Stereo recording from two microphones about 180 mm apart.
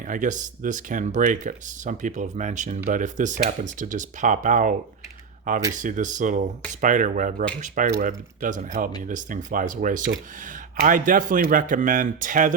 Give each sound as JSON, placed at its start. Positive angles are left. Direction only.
{"t": 0.1, "sound": "speech", "side_deg": -45}
{"t": 5.7, "sound": "speech", "side_deg": -45}